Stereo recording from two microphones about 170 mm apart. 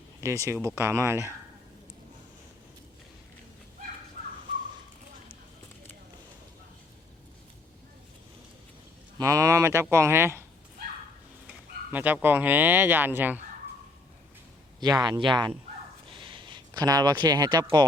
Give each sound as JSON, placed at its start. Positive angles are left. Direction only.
{"t": 0.2, "sound": "speech", "side_deg": -15}
{"t": 9.1, "sound": "speech", "side_deg": -20}
{"t": 11.4, "sound": "speech", "side_deg": -10}
{"t": 14.8, "sound": "speech", "side_deg": -25}
{"t": 16.0, "sound": "a sound", "side_deg": -30}